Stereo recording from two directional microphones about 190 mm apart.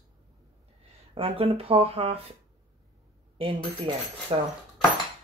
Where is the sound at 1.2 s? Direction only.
30° right (ahead or behind).